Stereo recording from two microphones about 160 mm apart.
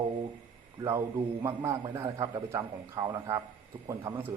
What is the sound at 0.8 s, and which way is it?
A man's voice, 15° right (ahead or behind).